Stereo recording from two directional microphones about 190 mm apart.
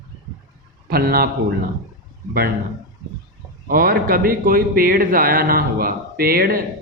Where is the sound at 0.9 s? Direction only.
55° right (ahead or behind).